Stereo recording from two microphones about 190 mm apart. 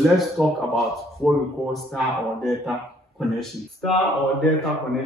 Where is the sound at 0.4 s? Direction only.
Centre (ahead or behind).